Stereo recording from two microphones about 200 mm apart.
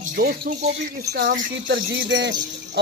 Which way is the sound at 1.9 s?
60° right (ahead or behind).